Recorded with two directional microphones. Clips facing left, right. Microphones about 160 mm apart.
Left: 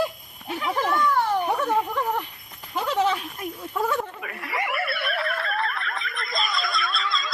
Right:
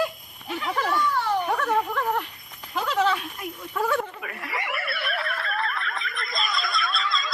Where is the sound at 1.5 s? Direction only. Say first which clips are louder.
Left 1 dB; 25° left (ahead or behind).